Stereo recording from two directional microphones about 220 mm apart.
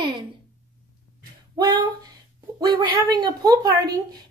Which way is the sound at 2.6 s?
20° right (ahead or behind).